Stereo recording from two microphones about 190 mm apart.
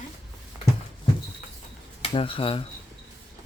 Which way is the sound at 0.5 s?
15° right (ahead or behind).